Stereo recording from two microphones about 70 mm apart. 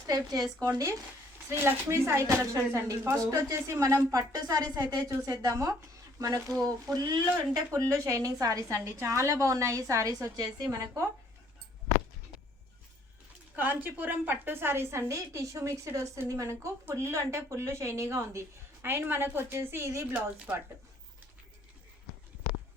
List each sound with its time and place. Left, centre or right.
0.1 s a woman's voice: right
1.5 s a woman's voice: right
3.2 s a woman's voice: right
6.6 s speech: right
7.7 s a woman's voice: right
8.7 s a woman's voice: right
13.6 s a woman's voice: right
20.1 s speech: centre